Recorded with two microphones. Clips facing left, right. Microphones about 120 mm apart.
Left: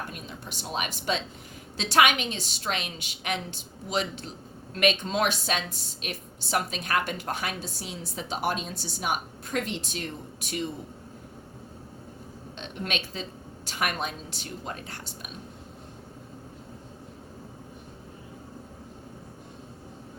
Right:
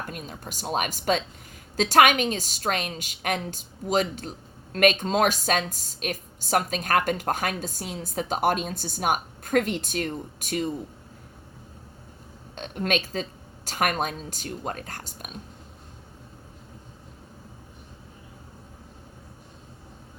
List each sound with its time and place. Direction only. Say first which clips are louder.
0.1 s a woman's voice: right 3 dB; 45° right (ahead or behind)
12.5 s a woman's voice: right 7 dB; 45° right (ahead or behind)